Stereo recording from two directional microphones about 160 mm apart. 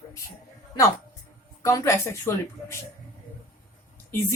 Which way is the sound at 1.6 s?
20° left (ahead or behind).